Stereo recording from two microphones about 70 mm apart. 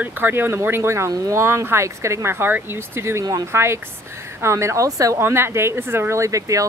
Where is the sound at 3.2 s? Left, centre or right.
Right.